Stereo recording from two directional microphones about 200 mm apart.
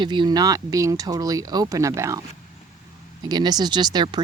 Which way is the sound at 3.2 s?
20° right (ahead or behind).